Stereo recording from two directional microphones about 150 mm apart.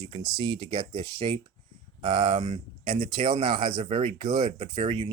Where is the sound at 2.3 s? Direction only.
60° right (ahead or behind); by 3.8 s 35° right (ahead or behind).